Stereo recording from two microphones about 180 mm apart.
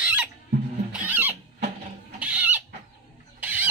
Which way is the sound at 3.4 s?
10° right (ahead or behind).